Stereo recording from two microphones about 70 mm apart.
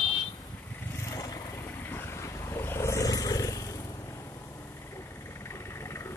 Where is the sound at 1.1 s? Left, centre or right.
Left.